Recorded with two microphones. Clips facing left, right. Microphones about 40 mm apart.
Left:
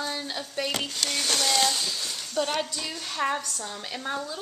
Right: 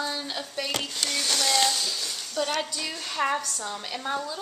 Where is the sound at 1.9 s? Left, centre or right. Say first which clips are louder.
Even; centre.